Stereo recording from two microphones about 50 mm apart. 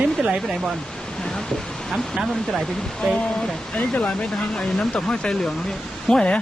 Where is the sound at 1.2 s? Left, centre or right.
Centre.